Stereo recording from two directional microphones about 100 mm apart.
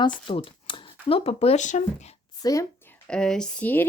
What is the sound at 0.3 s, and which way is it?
Speech, 60° left (ahead or behind).